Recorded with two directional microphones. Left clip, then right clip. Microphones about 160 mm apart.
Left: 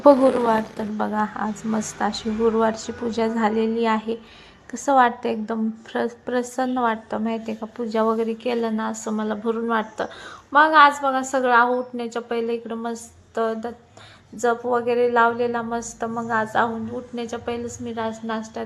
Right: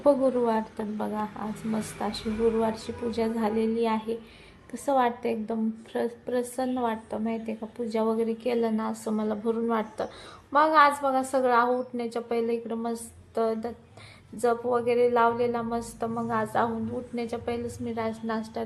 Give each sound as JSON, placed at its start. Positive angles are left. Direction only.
{"t": 0.0, "sound": "a woman's voice", "side_deg": 15}